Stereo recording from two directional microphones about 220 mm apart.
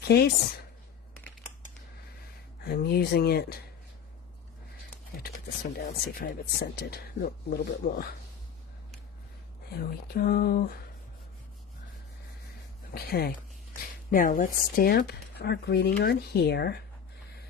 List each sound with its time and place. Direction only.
0.0 s a woman's voice: 45° left (ahead or behind)
2.6 s speech: 45° left (ahead or behind)
5.7 s speech: 45° left (ahead or behind)
9.7 s speech: 40° left (ahead or behind)
12.9 s speech: 45° left (ahead or behind)